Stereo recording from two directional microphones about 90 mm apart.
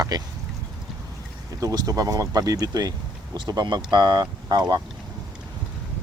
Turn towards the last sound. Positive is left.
turn(degrees=-50)  # may be behind; listen again after turning